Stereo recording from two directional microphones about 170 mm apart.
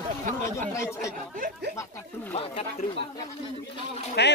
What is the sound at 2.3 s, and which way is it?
Speech, 40° left (ahead or behind).